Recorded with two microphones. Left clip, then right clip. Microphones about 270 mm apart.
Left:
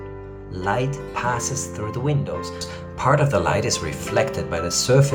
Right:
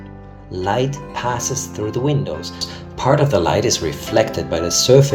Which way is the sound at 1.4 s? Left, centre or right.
Centre.